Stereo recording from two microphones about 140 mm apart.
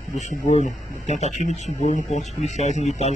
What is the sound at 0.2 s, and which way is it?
Speech, 55° left (ahead or behind).